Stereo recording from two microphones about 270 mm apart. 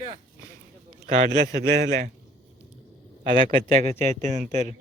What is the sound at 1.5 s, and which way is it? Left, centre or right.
Speech, right.